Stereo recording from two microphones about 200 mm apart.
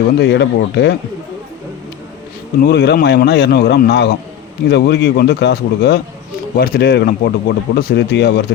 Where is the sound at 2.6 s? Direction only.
55° left (ahead or behind).